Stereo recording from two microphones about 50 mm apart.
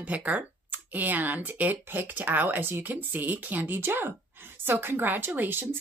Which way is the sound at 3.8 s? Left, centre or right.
Right.